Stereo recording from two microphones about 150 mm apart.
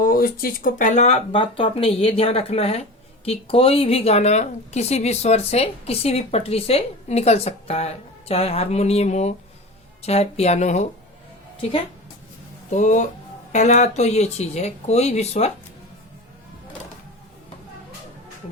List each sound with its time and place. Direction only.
0.0 s speech: 75° left (ahead or behind); by 10.8 s 50° left (ahead or behind)
12.7 s speech: 55° left (ahead or behind)